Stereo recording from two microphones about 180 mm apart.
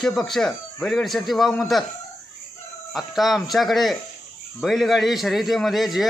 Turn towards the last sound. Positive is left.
turn(degrees=0)  # may be behind; listen again after turning